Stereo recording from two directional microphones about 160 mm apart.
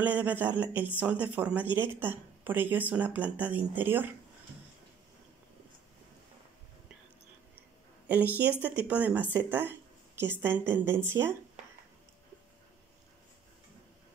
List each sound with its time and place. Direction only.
0.0 s speech: 10° right (ahead or behind)
8.1 s speech: 10° right (ahead or behind)